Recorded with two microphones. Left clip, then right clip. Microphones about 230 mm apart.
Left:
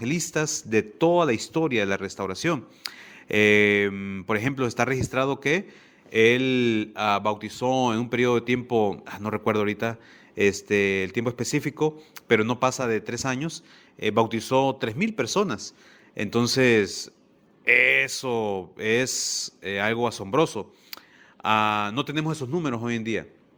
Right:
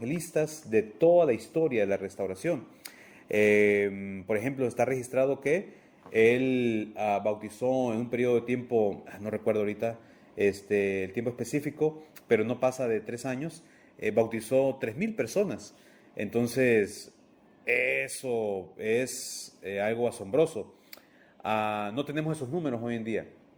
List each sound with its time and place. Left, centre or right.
0.0 s speech: left